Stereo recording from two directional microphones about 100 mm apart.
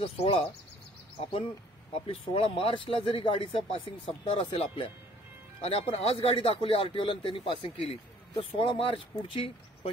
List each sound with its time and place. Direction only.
0.0 s speech: 70° left (ahead or behind)
2.0 s speech: 65° left (ahead or behind)
5.6 s speech: 70° left (ahead or behind)